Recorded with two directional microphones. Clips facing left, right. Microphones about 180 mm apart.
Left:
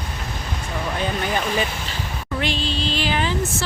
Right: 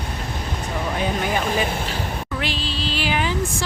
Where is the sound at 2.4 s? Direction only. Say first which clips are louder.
Left 5 dB; 5° right (ahead or behind).